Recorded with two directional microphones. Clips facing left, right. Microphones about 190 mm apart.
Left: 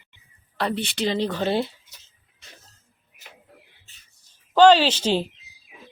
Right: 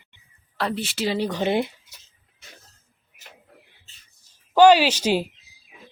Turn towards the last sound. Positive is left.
turn(degrees=-10)  # may be behind; listen again after turning